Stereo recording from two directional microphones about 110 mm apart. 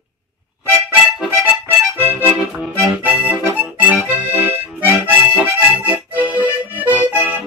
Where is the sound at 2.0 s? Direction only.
20° right (ahead or behind).